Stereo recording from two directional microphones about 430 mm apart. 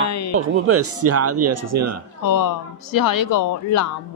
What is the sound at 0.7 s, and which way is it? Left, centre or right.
Speech, right.